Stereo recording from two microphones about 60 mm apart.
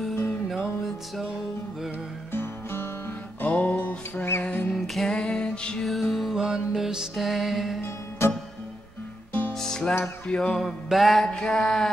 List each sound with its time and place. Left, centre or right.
0.1 s music: left
0.5 s music: centre
2.3 s music: left
3.3 s music: left
4.4 s a sound: left
4.6 s a sound: centre
5.1 s music: centre
5.9 s music: centre
8.2 s music: left
9.5 s music: centre
10.2 s mantra: centre
10.6 s mantra: centre